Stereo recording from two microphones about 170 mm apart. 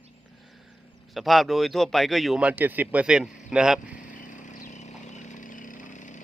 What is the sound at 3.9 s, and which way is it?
Vehicle, 50° left (ahead or behind).